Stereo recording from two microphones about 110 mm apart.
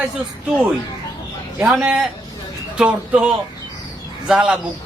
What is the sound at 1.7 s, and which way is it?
Speech, 5° right (ahead or behind).